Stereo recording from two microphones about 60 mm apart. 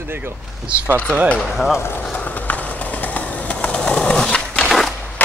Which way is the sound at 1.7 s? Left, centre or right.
Left.